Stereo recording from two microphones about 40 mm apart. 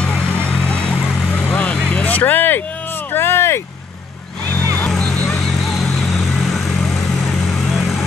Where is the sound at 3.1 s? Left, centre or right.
Left.